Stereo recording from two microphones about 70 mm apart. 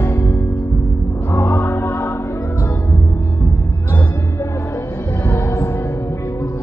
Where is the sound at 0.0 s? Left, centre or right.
Left.